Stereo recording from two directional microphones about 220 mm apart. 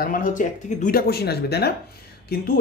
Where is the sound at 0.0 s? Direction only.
35° left (ahead or behind).